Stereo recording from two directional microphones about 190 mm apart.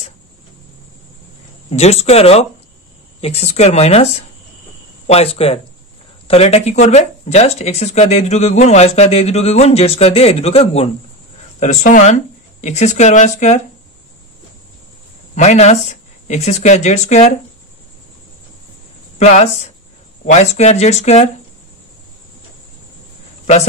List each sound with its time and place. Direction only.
1.7 s speech: 35° left (ahead or behind)
15.3 s speech: 35° left (ahead or behind)
19.1 s speech: 40° left (ahead or behind)